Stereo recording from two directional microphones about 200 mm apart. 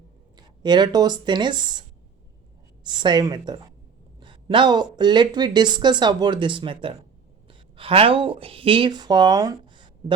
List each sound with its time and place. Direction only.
0.3 s speech: 20° right (ahead or behind)
2.8 s speech: 20° right (ahead or behind)